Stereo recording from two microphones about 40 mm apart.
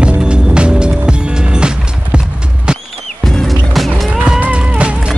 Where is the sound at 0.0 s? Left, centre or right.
Right.